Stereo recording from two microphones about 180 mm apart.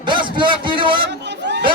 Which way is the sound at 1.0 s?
75° right (ahead or behind).